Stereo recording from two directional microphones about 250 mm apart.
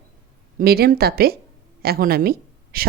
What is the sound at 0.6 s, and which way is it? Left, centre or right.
Speech, right.